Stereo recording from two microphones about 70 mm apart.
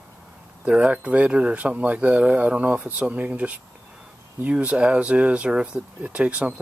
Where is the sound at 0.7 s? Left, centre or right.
Centre.